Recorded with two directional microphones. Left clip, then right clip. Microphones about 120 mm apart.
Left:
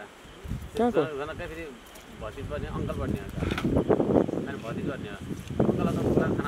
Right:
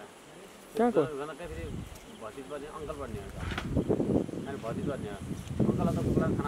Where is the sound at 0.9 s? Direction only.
30° left (ahead or behind).